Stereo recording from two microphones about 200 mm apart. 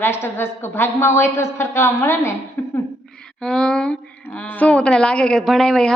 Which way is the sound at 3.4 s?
Centre (ahead or behind).